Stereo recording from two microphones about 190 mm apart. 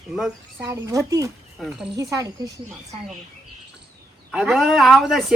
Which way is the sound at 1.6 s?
Centre (ahead or behind).